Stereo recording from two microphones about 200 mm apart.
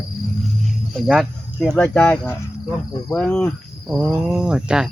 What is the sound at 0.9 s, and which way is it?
Speech, 5° right (ahead or behind).